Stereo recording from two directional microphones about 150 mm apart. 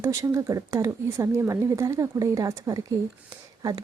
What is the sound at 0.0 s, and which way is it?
Speech, 20° right (ahead or behind).